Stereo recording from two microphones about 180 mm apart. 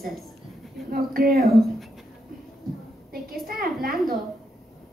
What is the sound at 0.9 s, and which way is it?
Speech, 55° right (ahead or behind).